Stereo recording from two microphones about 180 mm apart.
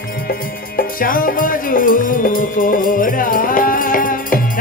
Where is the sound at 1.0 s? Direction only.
50° left (ahead or behind).